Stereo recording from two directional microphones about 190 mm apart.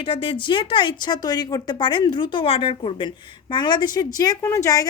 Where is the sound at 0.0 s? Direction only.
30° left (ahead or behind).